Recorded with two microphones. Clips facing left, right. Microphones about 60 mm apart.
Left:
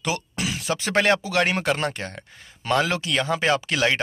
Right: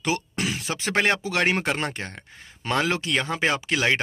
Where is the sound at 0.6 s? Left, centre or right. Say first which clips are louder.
Left 3 dB; right.